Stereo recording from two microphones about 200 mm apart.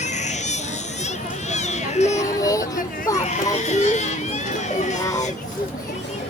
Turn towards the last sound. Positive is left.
turn(degrees=35)  # may be behind; listen again after turning